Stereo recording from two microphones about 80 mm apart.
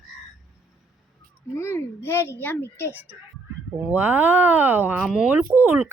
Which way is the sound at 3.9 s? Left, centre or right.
Right.